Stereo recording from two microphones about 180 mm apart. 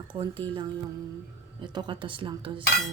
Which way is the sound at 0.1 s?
30° right (ahead or behind).